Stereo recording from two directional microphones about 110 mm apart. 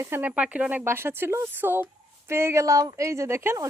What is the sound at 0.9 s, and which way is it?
Speech, 20° right (ahead or behind).